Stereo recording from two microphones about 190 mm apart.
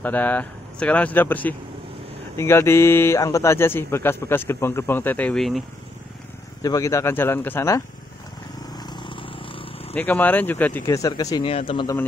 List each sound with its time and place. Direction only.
0.0 s speech: 10° left (ahead or behind)
6.6 s speech: 15° left (ahead or behind)
8.7 s vehicle: 20° left (ahead or behind)
9.9 s speech: 10° left (ahead or behind)